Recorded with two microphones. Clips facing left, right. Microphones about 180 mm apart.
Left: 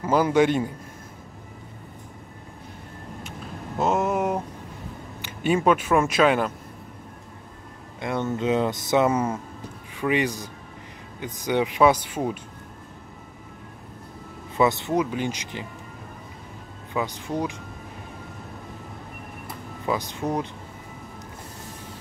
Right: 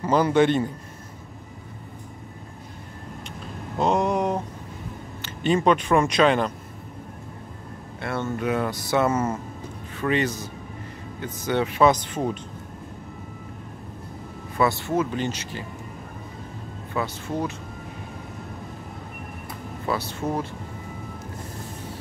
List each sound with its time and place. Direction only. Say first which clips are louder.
0.0 s speech: even; 10° left (ahead or behind)
3.8 s a sound: right 1 dB; 5° left (ahead or behind)
5.2 s speech: even; 10° left (ahead or behind)
8.0 s speech: left 1 dB; 15° left (ahead or behind)
14.6 s speech: left 1 dB; 20° left (ahead or behind)
16.9 s speech: even; 15° left (ahead or behind)
19.9 s speech: left 1 dB; 15° left (ahead or behind)